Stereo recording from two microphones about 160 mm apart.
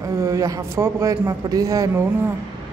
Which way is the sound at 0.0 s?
20° right (ahead or behind).